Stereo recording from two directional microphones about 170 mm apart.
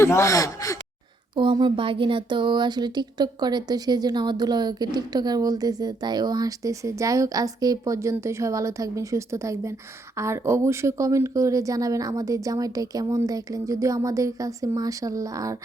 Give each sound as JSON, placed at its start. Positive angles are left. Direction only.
{"t": 0.0, "sound": "speech", "side_deg": 15}
{"t": 1.4, "sound": "speech", "side_deg": -25}